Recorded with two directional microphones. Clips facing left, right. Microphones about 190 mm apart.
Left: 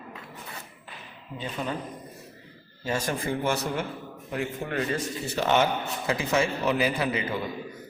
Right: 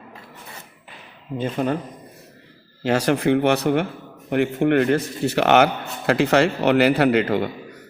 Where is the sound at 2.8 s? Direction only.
75° right (ahead or behind).